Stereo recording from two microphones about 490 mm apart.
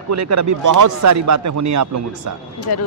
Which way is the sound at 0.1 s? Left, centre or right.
Right.